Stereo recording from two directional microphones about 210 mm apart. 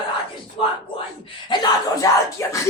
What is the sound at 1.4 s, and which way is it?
A man's voice, 20° left (ahead or behind).